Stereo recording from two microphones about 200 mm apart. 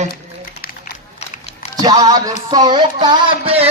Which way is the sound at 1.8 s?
20° right (ahead or behind).